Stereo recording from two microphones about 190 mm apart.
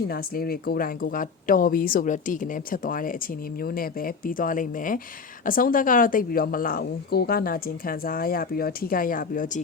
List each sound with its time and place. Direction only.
0.1 s speech: 50° left (ahead or behind)